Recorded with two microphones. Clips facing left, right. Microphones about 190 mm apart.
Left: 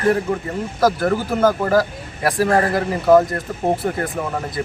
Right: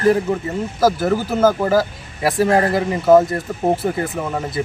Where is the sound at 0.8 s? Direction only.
5° right (ahead or behind).